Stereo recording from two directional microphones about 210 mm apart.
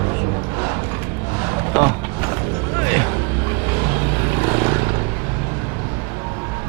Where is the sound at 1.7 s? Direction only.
15° right (ahead or behind).